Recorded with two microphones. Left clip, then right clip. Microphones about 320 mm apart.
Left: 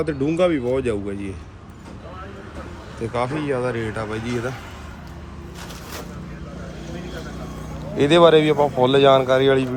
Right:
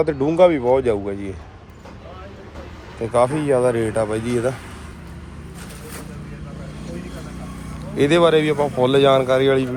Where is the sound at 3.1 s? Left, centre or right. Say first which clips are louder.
Right 7 dB; centre.